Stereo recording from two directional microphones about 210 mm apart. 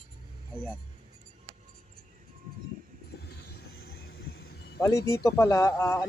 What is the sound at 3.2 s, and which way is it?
Vehicle, 50° left (ahead or behind).